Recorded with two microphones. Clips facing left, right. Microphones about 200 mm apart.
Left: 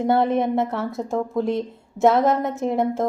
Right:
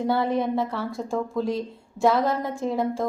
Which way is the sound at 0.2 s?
20° left (ahead or behind).